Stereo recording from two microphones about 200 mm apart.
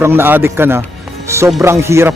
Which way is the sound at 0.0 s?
10° right (ahead or behind).